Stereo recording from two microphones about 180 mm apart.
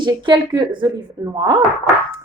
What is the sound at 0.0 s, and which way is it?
A woman's voice, 25° right (ahead or behind).